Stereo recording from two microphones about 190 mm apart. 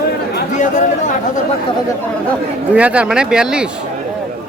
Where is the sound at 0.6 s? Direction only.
40° left (ahead or behind).